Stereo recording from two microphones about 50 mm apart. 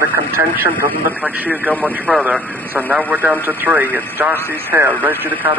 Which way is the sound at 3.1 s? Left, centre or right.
Right.